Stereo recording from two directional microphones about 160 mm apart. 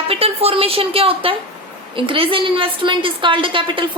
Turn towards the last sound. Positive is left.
turn(degrees=-30)  # may be behind; listen again after turning